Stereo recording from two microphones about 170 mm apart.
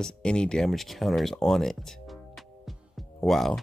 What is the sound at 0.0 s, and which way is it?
Speech, 5° left (ahead or behind).